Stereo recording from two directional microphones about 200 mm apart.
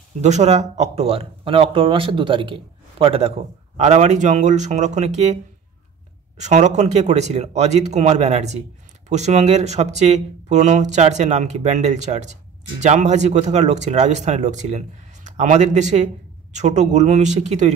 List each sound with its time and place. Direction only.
0.2 s speech: 35° right (ahead or behind)
6.4 s speech: 35° right (ahead or behind)